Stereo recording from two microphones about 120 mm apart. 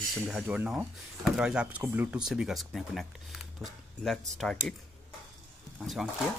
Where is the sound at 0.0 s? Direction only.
Centre (ahead or behind).